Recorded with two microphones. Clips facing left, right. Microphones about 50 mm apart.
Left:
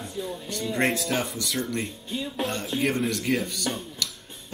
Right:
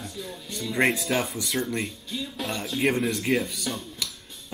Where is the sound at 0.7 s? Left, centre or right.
Centre.